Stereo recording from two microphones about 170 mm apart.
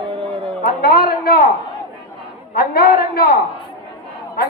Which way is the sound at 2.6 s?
60° left (ahead or behind).